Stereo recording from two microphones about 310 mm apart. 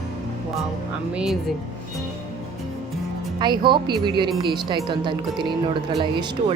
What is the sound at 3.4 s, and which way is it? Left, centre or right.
Speech, centre.